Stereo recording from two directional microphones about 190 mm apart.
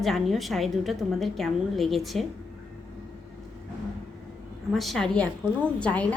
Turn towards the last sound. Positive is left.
turn(degrees=5)  # may be behind; listen again after turning